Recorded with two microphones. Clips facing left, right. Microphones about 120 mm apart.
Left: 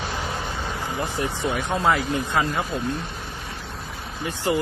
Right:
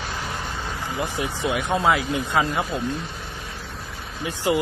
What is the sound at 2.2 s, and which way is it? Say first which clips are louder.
Speech: right 1 dB; 15° right (ahead or behind).